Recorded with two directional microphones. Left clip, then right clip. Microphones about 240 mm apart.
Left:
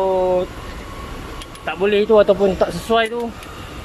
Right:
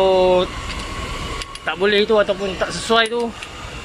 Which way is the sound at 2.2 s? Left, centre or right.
Centre.